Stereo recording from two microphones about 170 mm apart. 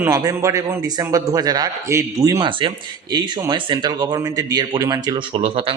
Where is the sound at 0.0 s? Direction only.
20° right (ahead or behind).